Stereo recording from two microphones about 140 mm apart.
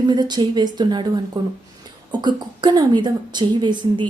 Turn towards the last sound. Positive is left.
turn(degrees=-35)  # may be behind; listen again after turning